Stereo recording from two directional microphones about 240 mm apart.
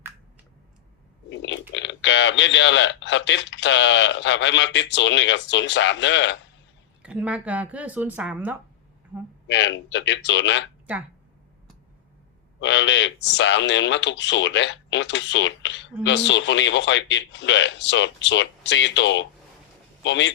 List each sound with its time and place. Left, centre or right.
1.3 s a sound: left
1.7 s speech: left
7.0 s speech: centre
9.5 s speech: left
12.5 s speech: left